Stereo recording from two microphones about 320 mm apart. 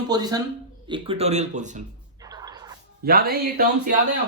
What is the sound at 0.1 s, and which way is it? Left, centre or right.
Speech, centre.